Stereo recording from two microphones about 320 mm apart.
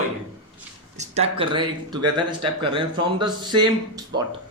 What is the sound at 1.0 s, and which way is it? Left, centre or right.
Speech, centre.